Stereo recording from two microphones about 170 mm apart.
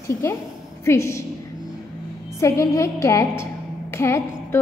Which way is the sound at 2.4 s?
20° left (ahead or behind).